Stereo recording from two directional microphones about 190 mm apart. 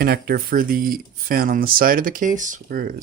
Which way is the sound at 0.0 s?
50° right (ahead or behind).